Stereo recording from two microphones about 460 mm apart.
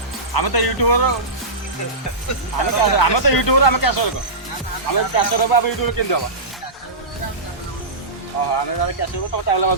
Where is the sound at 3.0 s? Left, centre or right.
Left.